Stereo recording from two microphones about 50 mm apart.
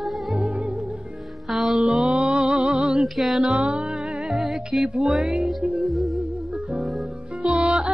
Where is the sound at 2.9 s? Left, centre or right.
Centre.